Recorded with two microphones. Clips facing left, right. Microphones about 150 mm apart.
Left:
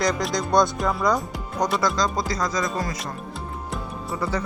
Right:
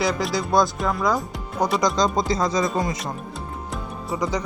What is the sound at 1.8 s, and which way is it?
Speech, 20° right (ahead or behind).